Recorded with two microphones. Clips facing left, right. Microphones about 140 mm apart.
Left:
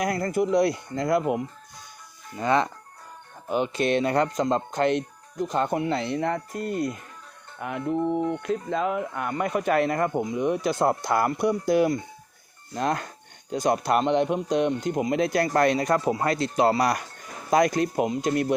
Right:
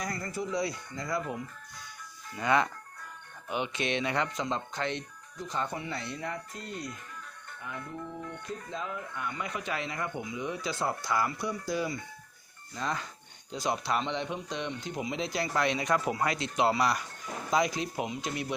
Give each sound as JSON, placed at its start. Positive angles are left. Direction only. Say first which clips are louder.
{"t": 0.0, "sound": "speech", "louder": "left 10 dB", "side_deg": 60}
{"t": 2.3, "sound": "speech", "louder": "left 4 dB", "side_deg": 25}
{"t": 3.4, "sound": "speech", "louder": "left 8 dB", "side_deg": 40}
{"t": 7.6, "sound": "speech", "louder": "left 14 dB", "side_deg": 70}
{"t": 10.1, "sound": "speech", "louder": "left 10 dB", "side_deg": 45}